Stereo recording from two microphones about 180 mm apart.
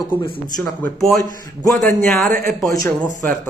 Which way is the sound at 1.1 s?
20° left (ahead or behind).